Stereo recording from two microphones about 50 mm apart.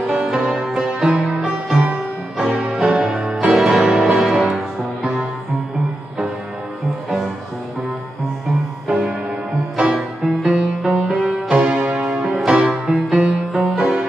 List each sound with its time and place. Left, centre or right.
0.1 s music: centre
2.3 s music: centre
8.8 s music: centre
11.5 s music: right
12.3 s music: centre
12.9 s music: right
13.5 s music: centre